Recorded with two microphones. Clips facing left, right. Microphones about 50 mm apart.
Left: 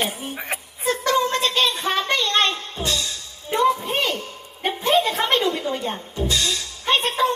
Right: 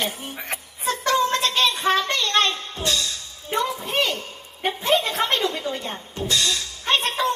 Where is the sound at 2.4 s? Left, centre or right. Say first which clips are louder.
Right 2 dB; left.